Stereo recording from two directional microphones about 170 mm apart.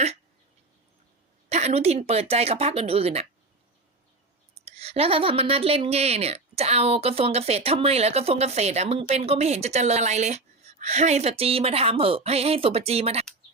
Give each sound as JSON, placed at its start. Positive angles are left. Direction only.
{"t": 1.5, "sound": "a woman's voice", "side_deg": -40}
{"t": 4.5, "sound": "a woman's voice", "side_deg": -35}